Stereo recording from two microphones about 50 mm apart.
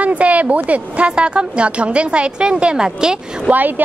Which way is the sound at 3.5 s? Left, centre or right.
Right.